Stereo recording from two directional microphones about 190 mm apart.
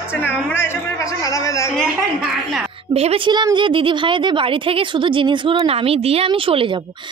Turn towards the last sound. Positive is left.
turn(degrees=-30)  # may be behind; listen again after turning